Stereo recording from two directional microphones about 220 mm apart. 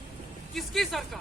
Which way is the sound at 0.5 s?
Centre (ahead or behind).